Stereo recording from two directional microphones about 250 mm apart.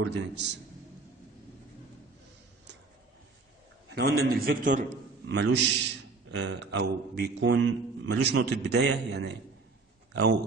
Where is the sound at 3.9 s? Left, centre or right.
Right.